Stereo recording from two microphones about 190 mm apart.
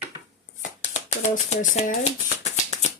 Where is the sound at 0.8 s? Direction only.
40° left (ahead or behind).